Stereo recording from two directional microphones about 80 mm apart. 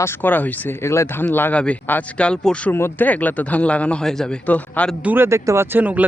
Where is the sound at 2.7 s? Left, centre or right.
Left; by 4.4 s centre.